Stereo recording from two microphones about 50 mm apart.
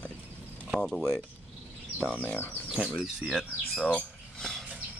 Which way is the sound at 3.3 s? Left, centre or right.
Centre.